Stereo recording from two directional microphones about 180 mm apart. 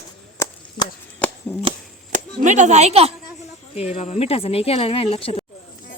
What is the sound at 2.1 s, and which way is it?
Speech, 45° right (ahead or behind).